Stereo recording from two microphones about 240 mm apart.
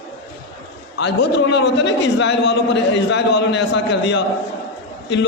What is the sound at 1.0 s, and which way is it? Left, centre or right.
A man's voice, left.